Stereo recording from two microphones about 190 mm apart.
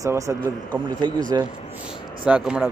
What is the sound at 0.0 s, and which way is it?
A man's voice, 15° right (ahead or behind).